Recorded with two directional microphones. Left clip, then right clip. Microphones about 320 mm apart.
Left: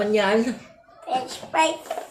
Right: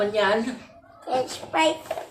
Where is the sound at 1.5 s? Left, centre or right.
Right.